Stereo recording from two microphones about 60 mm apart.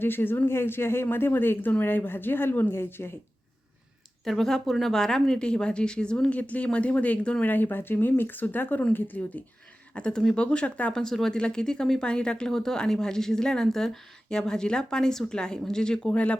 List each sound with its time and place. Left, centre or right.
0.0 s speech: left
4.3 s speech: centre
7.4 s speech: left
9.9 s speech: centre
11.0 s speech: centre